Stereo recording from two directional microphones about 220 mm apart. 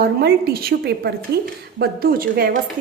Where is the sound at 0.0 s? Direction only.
45° right (ahead or behind).